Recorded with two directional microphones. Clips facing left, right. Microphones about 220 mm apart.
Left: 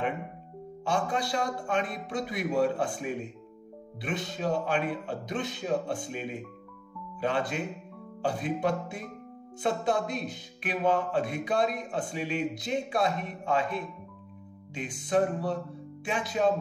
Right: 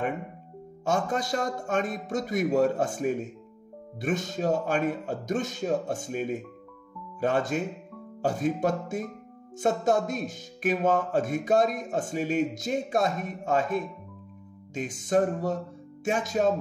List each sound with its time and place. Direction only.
0.8 s music: 45° right (ahead or behind)